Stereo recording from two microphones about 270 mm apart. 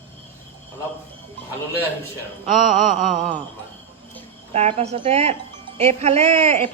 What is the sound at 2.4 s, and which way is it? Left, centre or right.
Speech, right.